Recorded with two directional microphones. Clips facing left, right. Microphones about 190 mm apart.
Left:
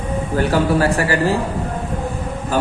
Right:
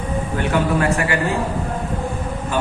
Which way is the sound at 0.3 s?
35° left (ahead or behind).